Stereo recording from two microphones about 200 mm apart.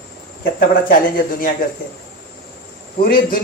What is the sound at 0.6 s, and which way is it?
Speech, 45° left (ahead or behind).